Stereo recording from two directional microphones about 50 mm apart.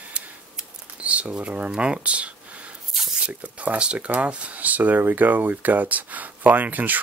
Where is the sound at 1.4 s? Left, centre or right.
Right.